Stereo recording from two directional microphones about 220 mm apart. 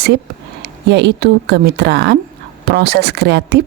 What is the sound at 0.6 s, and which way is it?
A woman's voice, 50° right (ahead or behind).